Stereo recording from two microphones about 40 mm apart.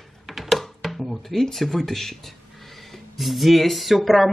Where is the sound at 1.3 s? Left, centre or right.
Centre.